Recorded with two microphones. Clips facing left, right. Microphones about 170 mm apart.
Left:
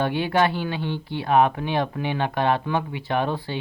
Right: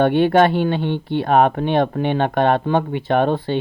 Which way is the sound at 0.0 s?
60° right (ahead or behind).